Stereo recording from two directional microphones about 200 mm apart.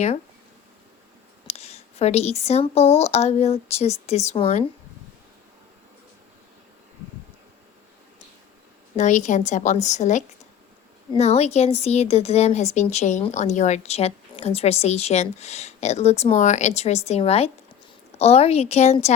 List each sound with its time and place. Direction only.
1.5 s speech: 30° left (ahead or behind)
9.0 s speech: 35° left (ahead or behind)